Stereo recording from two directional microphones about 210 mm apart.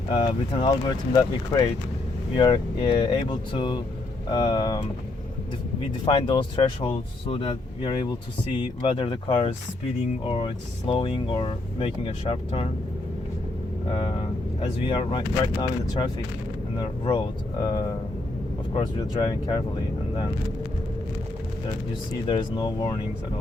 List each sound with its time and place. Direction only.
0.1 s speech: 25° left (ahead or behind)
6.1 s speech: 25° left (ahead or behind)
13.9 s speech: 25° left (ahead or behind)
16.7 s speech: 20° left (ahead or behind)
22.1 s speech: 20° left (ahead or behind)